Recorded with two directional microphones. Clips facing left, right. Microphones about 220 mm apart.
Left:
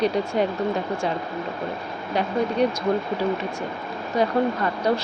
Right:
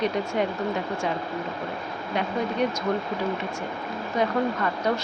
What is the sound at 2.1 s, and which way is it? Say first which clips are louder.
Speech: left 4 dB; 35° left (ahead or behind).